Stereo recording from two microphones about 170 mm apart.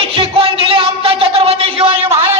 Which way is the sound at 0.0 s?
30° right (ahead or behind).